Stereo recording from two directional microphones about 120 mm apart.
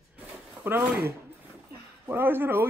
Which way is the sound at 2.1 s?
20° right (ahead or behind).